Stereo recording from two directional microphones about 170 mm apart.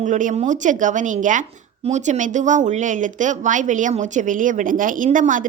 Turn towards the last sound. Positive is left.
turn(degrees=-50)  # may be behind; listen again after turning